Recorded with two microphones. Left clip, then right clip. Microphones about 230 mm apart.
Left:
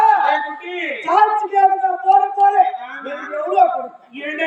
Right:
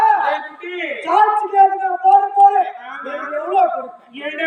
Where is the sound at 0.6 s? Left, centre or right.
Centre.